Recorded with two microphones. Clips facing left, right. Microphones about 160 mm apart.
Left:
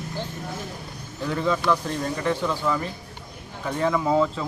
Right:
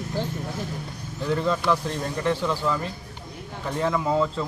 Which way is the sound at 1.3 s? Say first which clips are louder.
Even; centre (ahead or behind).